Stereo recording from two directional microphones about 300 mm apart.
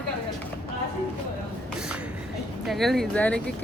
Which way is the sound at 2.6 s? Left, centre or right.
Centre.